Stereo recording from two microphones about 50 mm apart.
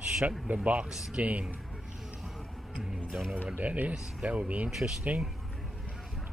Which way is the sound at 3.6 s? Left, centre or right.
Right.